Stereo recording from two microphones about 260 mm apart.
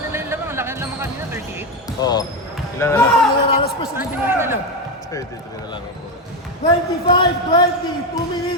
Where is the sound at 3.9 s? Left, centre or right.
Centre.